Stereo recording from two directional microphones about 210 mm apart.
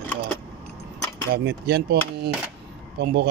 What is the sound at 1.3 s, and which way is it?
Speech, 45° right (ahead or behind).